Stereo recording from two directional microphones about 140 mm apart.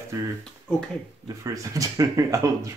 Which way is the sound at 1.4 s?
25° right (ahead or behind).